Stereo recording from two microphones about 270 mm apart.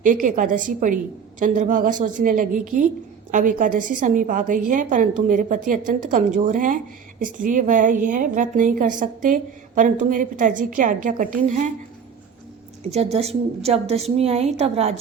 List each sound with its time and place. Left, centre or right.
0.0 s a woman's voice: right
12.9 s a woman's voice: right